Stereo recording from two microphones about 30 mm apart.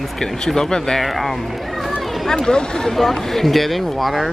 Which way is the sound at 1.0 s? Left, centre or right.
Centre.